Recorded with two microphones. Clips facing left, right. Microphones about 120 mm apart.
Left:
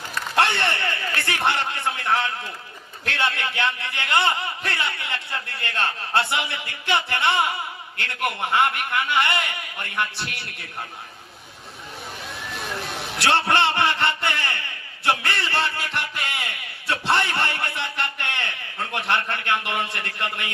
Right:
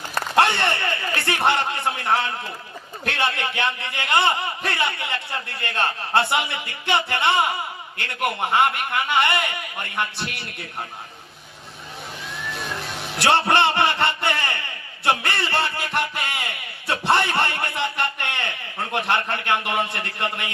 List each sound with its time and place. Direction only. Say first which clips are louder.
0.3 s a man's voice: right 2 dB; 20° right (ahead or behind)
13.1 s a man's voice: right 2 dB; 20° right (ahead or behind)
15.0 s a sound: right 1 dB; 20° right (ahead or behind)